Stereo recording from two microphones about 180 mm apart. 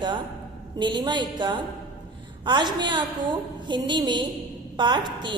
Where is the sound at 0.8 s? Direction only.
25° right (ahead or behind).